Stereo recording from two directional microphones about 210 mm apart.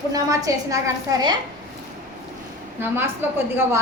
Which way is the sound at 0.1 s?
15° right (ahead or behind).